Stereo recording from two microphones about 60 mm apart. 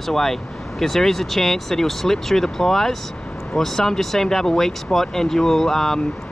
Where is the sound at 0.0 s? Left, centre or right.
Centre.